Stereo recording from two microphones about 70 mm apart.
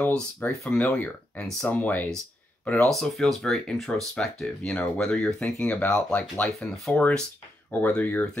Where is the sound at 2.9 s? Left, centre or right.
Centre.